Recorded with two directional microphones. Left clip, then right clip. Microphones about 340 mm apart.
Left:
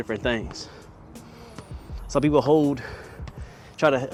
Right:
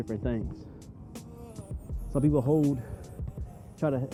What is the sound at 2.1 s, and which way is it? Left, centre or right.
Speech, centre.